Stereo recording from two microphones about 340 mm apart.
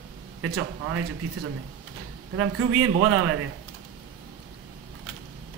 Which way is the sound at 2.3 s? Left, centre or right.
Right.